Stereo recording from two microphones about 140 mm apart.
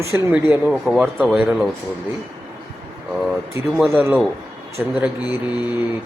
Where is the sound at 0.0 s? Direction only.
15° right (ahead or behind).